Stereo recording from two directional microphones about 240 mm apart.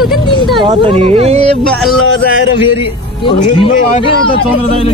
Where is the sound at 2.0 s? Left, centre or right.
Left.